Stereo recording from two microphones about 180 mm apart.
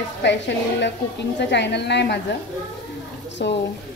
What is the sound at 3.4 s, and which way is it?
Speech, 70° left (ahead or behind).